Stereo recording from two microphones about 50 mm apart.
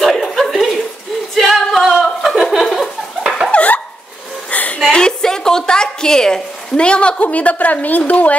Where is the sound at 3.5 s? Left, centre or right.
Left.